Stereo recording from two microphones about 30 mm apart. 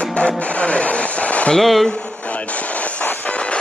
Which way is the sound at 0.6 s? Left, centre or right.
Left.